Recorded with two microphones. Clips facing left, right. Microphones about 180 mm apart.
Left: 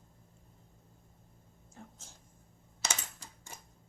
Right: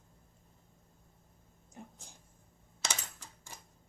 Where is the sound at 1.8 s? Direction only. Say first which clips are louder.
Right 2 dB; 15° right (ahead or behind).